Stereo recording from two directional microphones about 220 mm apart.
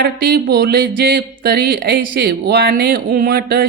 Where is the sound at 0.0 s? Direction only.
40° right (ahead or behind).